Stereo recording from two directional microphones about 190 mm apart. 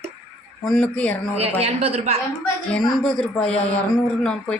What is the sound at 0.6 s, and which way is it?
Speech, 5° left (ahead or behind).